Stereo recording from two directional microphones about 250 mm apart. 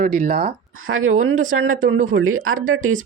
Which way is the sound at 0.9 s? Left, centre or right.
Right.